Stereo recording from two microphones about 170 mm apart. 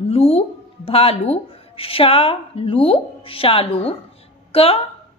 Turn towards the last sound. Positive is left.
turn(degrees=35)  # may be behind; listen again after turning